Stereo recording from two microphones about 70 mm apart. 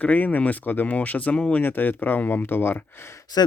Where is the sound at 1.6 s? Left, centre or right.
Left.